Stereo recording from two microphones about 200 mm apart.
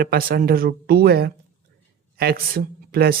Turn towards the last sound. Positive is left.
turn(degrees=-50)  # may be behind; listen again after turning